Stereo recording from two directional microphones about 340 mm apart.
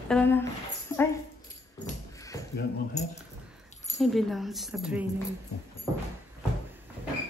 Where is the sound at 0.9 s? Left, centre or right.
Centre.